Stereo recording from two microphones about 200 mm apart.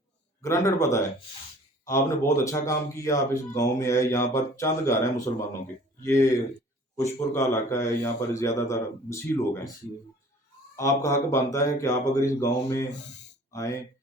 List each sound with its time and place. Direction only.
0.4 s a man's voice: 15° left (ahead or behind)
10.8 s a man's voice: 15° left (ahead or behind)